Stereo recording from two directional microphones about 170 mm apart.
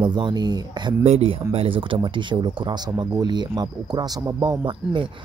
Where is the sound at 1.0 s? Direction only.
35° right (ahead or behind).